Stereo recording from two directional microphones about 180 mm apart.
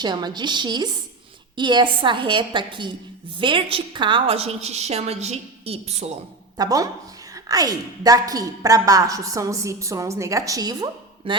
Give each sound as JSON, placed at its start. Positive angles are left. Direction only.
{"t": 0.0, "sound": "a woman's voice", "side_deg": -25}
{"t": 6.6, "sound": "a woman's voice", "side_deg": -20}